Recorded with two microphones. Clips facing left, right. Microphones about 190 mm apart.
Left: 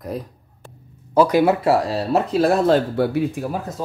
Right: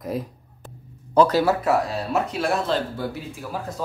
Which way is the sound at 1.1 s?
15° left (ahead or behind).